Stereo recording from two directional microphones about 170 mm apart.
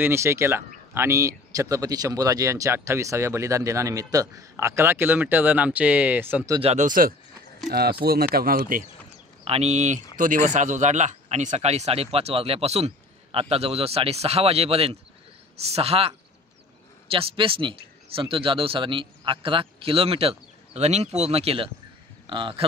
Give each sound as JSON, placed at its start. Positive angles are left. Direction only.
{"t": 0.0, "sound": "speech", "side_deg": -15}
{"t": 6.6, "sound": "speech", "side_deg": -40}
{"t": 8.0, "sound": "speech", "side_deg": -65}
{"t": 9.4, "sound": "a man's voice", "side_deg": -35}